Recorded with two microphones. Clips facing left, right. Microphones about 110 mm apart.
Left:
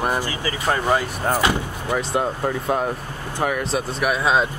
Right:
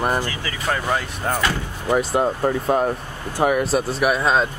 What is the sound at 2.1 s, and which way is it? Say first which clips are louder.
Speech: right 3 dB; centre (ahead or behind).